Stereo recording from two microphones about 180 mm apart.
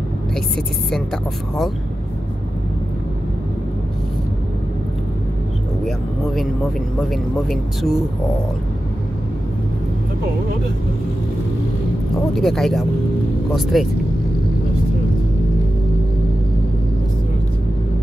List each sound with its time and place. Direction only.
5.9 s speech: centre (ahead or behind)
12.4 s speech: centre (ahead or behind)